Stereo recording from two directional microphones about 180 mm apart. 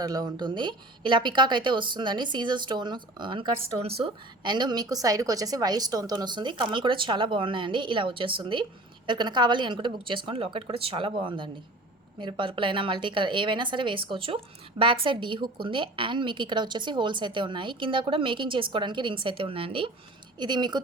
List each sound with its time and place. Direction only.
0.0 s a woman's voice: 20° right (ahead or behind)